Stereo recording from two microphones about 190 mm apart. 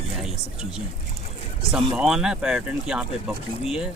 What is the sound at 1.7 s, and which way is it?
Speech, 5° right (ahead or behind).